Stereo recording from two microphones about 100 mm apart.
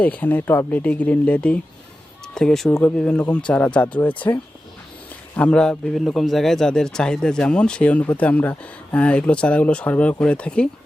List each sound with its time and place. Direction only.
0.0 s a man's voice: 15° left (ahead or behind)
5.4 s a man's voice: 10° left (ahead or behind)